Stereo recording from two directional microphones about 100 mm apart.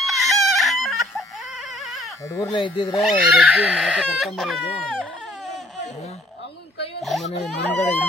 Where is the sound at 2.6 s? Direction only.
50° left (ahead or behind).